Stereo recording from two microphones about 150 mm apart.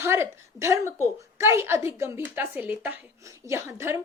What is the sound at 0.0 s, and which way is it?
A woman's voice, 15° right (ahead or behind).